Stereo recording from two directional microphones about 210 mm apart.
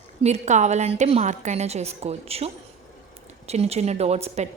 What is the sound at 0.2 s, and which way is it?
A woman's voice, 35° right (ahead or behind).